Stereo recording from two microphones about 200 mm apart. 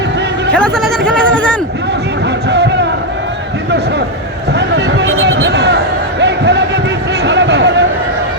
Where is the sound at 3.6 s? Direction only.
60° right (ahead or behind).